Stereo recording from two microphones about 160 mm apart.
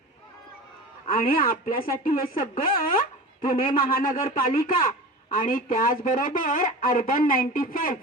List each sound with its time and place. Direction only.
1.0 s speech: 60° left (ahead or behind)